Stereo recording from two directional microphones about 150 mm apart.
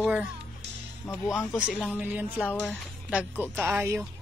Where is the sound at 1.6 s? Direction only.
5° right (ahead or behind).